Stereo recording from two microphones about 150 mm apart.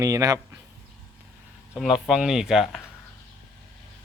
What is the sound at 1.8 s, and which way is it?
Speech, centre (ahead or behind).